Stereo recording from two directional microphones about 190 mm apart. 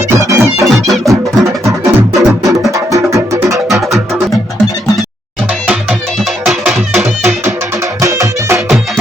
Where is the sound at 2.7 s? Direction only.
15° right (ahead or behind).